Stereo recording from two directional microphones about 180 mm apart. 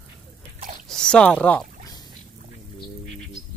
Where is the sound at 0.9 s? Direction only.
5° left (ahead or behind).